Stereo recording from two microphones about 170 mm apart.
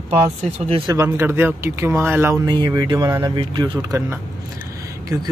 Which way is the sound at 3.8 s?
20° right (ahead or behind).